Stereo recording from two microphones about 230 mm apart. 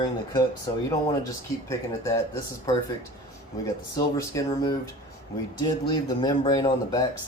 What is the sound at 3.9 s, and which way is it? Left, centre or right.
Speech, centre.